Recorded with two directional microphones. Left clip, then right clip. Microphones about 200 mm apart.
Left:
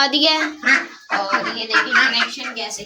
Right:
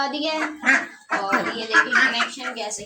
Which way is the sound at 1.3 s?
5° right (ahead or behind).